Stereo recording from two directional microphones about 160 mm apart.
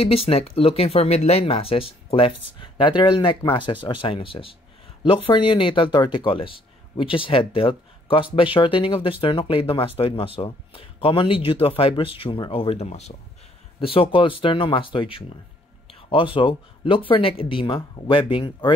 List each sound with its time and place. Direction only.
0.0 s speech: 35° left (ahead or behind)
15.9 s music: 35° left (ahead or behind)
16.3 s speech: 30° left (ahead or behind)